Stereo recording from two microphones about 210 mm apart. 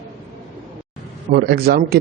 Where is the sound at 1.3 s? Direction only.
50° right (ahead or behind).